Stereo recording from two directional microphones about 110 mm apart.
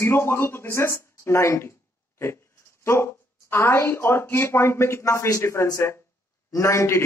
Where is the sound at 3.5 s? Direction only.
20° left (ahead or behind).